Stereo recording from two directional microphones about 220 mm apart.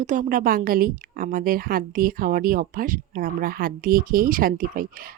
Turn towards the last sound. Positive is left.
turn(degrees=-40)  # may be behind; listen again after turning